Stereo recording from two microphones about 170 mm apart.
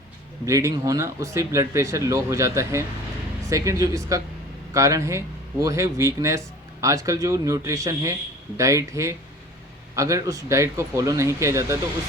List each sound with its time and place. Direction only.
0.4 s speech: 20° right (ahead or behind)